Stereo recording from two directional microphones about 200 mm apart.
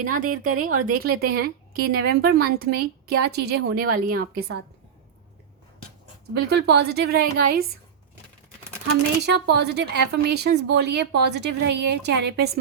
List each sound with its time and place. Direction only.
0.0 s a woman's voice: 45° right (ahead or behind)
6.5 s a woman's voice: 55° right (ahead or behind)
9.2 s speech: 55° right (ahead or behind)